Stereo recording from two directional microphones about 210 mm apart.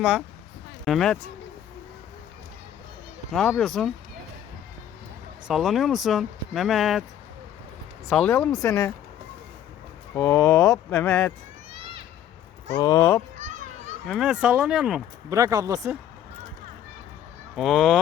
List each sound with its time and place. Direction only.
0.9 s speech: centre (ahead or behind)
3.3 s speech: centre (ahead or behind)
5.5 s speech: centre (ahead or behind)
8.1 s speech: 5° left (ahead or behind)
10.2 s speech: 10° left (ahead or behind)
12.7 s speech: 15° left (ahead or behind)
13.4 s children playing: 35° right (ahead or behind)
14.1 s speech: 5° right (ahead or behind)
15.3 s speech: 15° right (ahead or behind)
17.6 s speech: centre (ahead or behind)